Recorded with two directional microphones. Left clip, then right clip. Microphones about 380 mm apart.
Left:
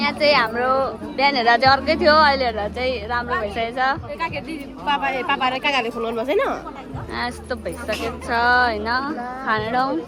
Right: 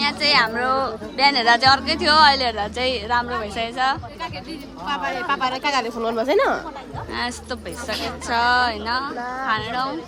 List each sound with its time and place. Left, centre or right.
0.0 s speech: centre
4.9 s speech: right
5.8 s speech: centre